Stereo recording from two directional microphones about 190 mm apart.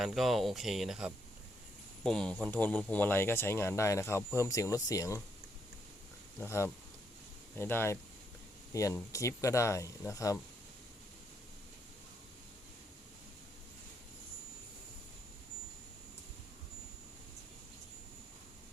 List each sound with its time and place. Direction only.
0.0 s speech: centre (ahead or behind); by 5.2 s 15° left (ahead or behind)
6.4 s speech: 15° left (ahead or behind)